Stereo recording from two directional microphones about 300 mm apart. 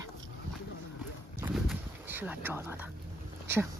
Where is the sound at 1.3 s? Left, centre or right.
Centre.